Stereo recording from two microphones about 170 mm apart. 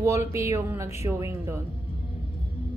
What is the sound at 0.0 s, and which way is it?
A woman's voice, 20° right (ahead or behind).